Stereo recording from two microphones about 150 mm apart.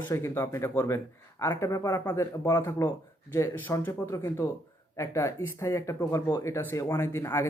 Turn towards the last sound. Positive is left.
turn(degrees=20)  # may be behind; listen again after turning